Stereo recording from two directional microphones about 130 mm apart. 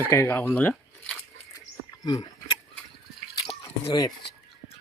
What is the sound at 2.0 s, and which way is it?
Speech, 30° left (ahead or behind).